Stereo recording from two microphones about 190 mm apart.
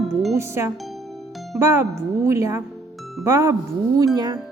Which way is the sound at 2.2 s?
15° right (ahead or behind).